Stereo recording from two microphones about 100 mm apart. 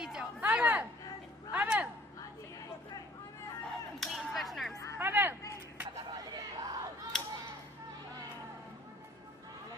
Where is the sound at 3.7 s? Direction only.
Centre (ahead or behind).